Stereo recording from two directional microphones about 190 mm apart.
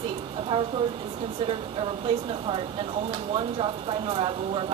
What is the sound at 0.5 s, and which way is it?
Speech, 30° right (ahead or behind).